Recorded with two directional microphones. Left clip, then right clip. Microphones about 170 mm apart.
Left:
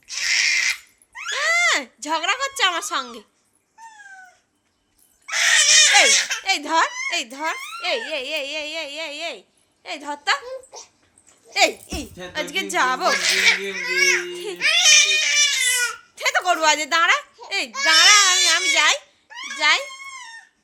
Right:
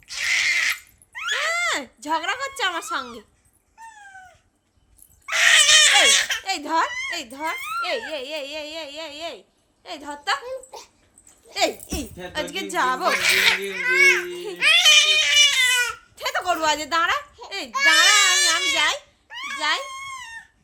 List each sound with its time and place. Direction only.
0.1 s wail: centre (ahead or behind)
5.2 s baby cry: 20° right (ahead or behind)
6.1 s a woman's voice: 10° right (ahead or behind); by 10.4 s 10° left (ahead or behind)
10.4 s speech: 15° right (ahead or behind)
11.9 s speech: 20° right (ahead or behind)
12.5 s speech: centre (ahead or behind)
13.1 s speech: 10° right (ahead or behind)
14.3 s crying: 5° left (ahead or behind); by 16.0 s 15° right (ahead or behind)
16.1 s baby laughter: 5° left (ahead or behind)
18.0 s speech: 5° left (ahead or behind)
19.3 s wail: 5° right (ahead or behind)
19.5 s a child's voice: 5° left (ahead or behind)